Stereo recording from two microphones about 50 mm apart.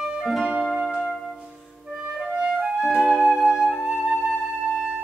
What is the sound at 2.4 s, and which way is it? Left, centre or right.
Music, centre.